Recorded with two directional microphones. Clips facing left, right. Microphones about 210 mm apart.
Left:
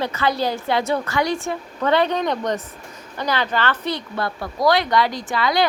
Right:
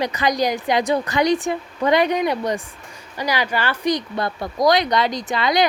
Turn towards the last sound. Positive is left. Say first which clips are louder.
# right 1 dB
turn(degrees=-20)  # may be behind; listen again after turning